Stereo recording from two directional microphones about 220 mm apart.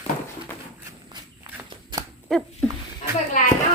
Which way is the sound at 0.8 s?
15° right (ahead or behind).